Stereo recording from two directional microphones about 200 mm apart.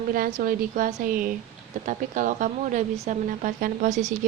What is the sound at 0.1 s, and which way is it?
A woman's voice, 45° right (ahead or behind).